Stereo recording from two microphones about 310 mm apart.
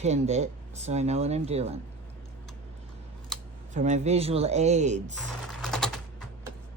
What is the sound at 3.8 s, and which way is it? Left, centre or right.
Speech, right.